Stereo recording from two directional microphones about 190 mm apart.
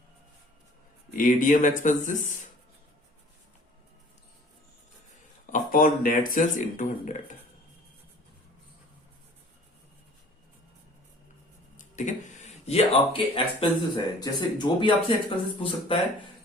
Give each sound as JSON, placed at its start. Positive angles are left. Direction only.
{"t": 1.1, "sound": "speech", "side_deg": 45}
{"t": 5.5, "sound": "speech", "side_deg": 45}
{"t": 11.8, "sound": "speech", "side_deg": 40}